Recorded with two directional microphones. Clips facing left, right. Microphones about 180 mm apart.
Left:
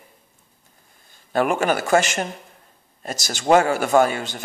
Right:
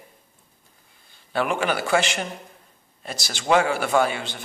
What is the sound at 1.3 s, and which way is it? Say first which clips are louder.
A man's voice: left 4 dB; 45° left (ahead or behind).